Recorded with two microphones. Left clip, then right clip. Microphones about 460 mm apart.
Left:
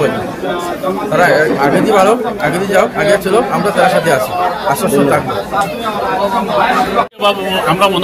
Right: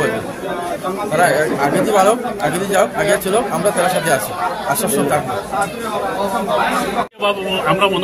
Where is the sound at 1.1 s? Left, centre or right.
Right.